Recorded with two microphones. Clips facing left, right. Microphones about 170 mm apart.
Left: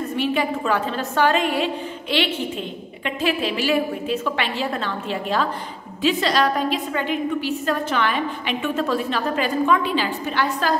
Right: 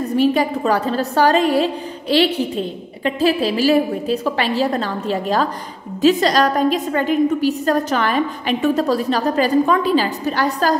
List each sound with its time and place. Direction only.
0.1 s a woman's voice: 40° right (ahead or behind)